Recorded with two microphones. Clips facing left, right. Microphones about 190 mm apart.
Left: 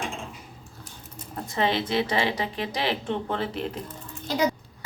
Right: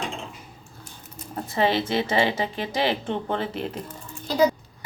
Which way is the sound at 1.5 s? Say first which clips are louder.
Right 2 dB; 5° right (ahead or behind).